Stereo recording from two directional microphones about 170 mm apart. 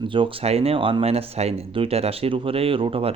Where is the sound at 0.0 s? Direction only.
30° right (ahead or behind).